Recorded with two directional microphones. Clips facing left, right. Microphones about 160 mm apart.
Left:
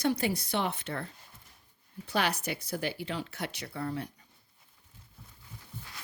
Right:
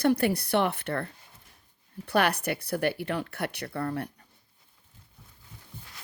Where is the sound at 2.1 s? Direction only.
60° right (ahead or behind).